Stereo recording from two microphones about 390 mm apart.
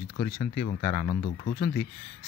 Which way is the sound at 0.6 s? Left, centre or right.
Centre.